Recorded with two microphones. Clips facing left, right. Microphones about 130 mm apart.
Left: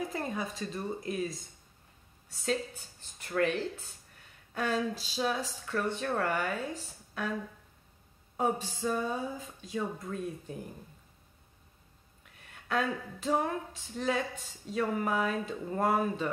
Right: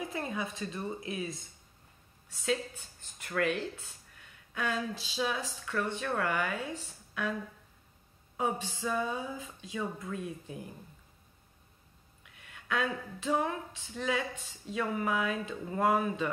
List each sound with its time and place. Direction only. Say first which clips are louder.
0.1 s speech: left 1 dB; 40° left (ahead or behind)
4.6 s speech: left 3 dB; 40° left (ahead or behind)
8.4 s speech: left 2 dB; 45° left (ahead or behind)
12.2 s speech: even; 40° left (ahead or behind)